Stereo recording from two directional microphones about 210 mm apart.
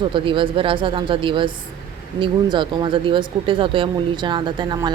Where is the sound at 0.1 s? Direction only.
25° right (ahead or behind).